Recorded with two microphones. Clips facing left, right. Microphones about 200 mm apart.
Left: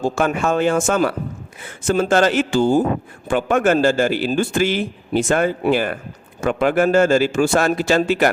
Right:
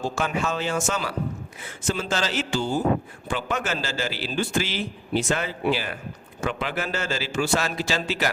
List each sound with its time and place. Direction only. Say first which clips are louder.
0.0 s a man's voice: left 7 dB; 50° left (ahead or behind)